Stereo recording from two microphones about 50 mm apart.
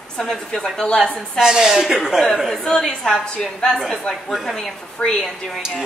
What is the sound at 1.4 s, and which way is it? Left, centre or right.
Speech, centre.